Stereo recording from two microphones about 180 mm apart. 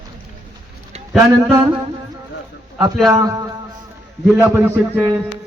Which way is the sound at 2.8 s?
20° right (ahead or behind).